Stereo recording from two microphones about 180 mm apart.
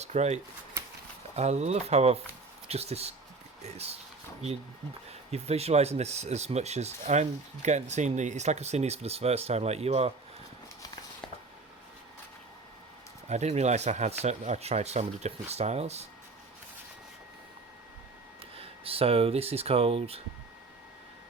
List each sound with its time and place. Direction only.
0.0 s speech: 40° right (ahead or behind)
1.4 s speech: 40° right (ahead or behind)
5.3 s speech: 35° right (ahead or behind)
13.2 s speech: 40° right (ahead or behind)
18.5 s speech: 30° right (ahead or behind)